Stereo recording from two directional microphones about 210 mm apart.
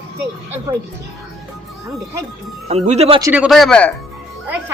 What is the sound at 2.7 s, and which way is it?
Speech, 30° right (ahead or behind).